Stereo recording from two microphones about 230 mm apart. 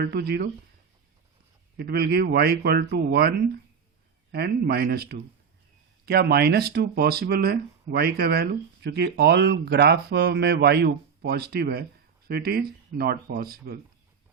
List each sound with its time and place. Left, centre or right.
0.0 s speech: right
1.7 s speech: right